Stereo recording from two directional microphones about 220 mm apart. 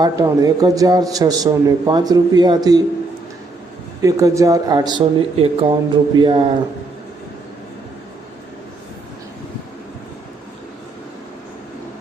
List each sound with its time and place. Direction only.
0.0 s a man's voice: 15° right (ahead or behind)
4.0 s speech: 15° right (ahead or behind)